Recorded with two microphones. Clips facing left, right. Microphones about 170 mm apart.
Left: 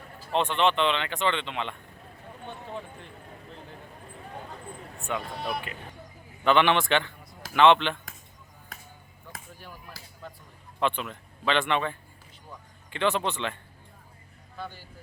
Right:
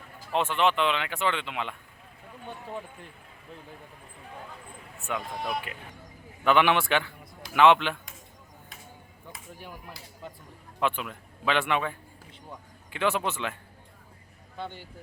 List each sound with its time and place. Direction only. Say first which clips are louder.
0.3 s speech: left 1 dB; 5° right (ahead or behind)
5.0 s speech: even; centre (ahead or behind)
9.6 s speech: right 2 dB; 15° right (ahead or behind)
10.8 s a man's voice: left 1 dB; 5° right (ahead or behind)
14.6 s speech: right 2 dB; 25° right (ahead or behind)